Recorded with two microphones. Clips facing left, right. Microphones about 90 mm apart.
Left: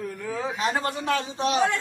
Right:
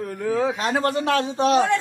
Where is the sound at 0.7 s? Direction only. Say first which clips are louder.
Right 5 dB; 90° right; by 1.6 s 65° right (ahead or behind).